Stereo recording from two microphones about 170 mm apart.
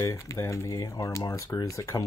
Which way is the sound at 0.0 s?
15° left (ahead or behind).